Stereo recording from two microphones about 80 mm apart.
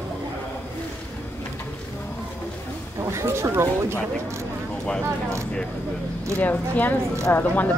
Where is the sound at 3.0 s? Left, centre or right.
Right.